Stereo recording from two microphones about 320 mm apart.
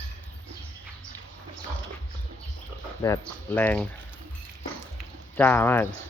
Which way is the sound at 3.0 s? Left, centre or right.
Centre.